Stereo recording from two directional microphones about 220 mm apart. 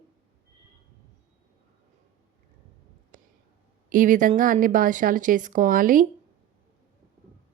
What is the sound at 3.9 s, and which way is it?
A woman's voice, 35° right (ahead or behind).